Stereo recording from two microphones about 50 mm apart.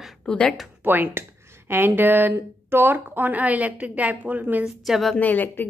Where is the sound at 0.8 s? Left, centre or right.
Right.